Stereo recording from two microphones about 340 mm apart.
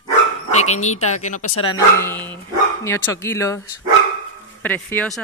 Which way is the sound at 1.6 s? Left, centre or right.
Centre.